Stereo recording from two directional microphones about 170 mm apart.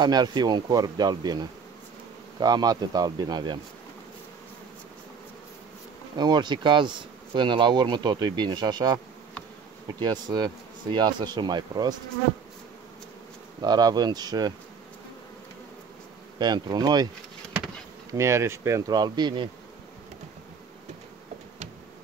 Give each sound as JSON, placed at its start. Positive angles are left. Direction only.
{"t": 0.0, "sound": "speech", "side_deg": -25}
{"t": 6.1, "sound": "speech", "side_deg": -25}
{"t": 13.6, "sound": "speech", "side_deg": -25}
{"t": 16.3, "sound": "speech", "side_deg": -25}
{"t": 18.1, "sound": "speech", "side_deg": -15}